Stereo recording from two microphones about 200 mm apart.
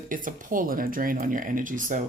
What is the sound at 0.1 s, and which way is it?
Speech, 45° right (ahead or behind).